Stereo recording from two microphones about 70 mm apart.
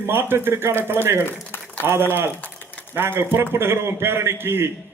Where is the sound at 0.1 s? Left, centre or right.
Right.